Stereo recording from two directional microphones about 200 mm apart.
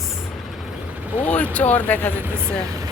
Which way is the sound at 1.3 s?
5° left (ahead or behind).